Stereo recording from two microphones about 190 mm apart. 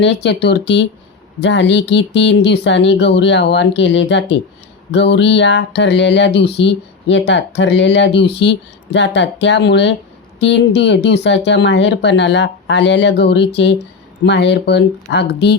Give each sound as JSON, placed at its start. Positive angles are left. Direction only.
{"t": 0.0, "sound": "speech", "side_deg": 65}
{"t": 1.4, "sound": "a sound", "side_deg": 65}
{"t": 10.4, "sound": "speech", "side_deg": 65}